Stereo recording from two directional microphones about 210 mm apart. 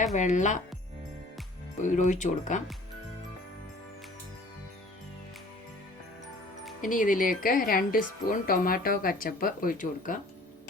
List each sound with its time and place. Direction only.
0.0 s a woman's voice: 35° left (ahead or behind)
1.8 s a woman's voice: 35° left (ahead or behind)
6.8 s a woman's voice: 40° left (ahead or behind)